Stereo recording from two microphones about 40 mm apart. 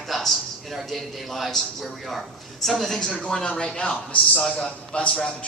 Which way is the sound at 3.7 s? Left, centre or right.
Left.